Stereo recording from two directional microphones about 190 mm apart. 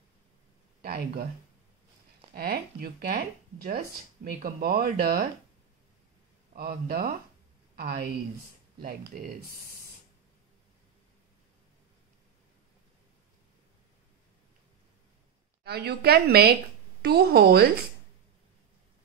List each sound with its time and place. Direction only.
0.8 s a sound: 50° right (ahead or behind)
2.3 s speech: 50° right (ahead or behind)
6.5 s a woman's voice: 50° right (ahead or behind)
15.6 s a woman's voice: 60° right (ahead or behind)